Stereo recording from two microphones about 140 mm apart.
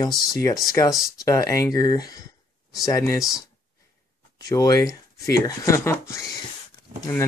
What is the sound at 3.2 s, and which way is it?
Speech, 5° right (ahead or behind).